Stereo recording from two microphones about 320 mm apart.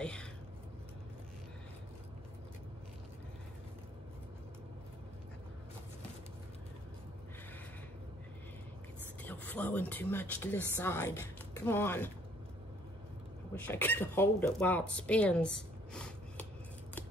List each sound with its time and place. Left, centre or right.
0.0 s a sound: centre
9.2 s speech: centre
13.6 s speech: centre